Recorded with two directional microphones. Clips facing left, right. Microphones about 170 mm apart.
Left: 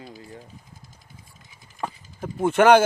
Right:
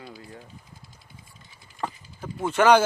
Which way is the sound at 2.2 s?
50° left (ahead or behind).